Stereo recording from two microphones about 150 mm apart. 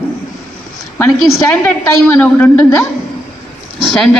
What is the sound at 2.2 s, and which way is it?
Speech, 15° left (ahead or behind).